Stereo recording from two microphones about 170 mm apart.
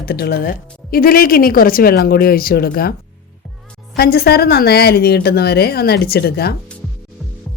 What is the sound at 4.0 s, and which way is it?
A woman's voice, 65° left (ahead or behind).